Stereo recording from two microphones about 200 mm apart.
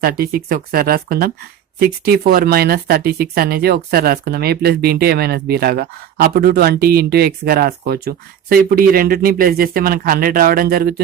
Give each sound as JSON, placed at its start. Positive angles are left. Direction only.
{"t": 0.0, "sound": "speech", "side_deg": -45}